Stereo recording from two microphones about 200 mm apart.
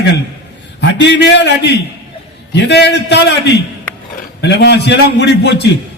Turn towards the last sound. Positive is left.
turn(degrees=60)  # may be behind; listen again after turning